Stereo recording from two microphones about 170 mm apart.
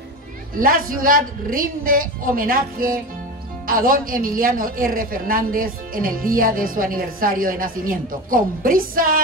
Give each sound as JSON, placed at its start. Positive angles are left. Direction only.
{"t": 0.6, "sound": "speech", "side_deg": -55}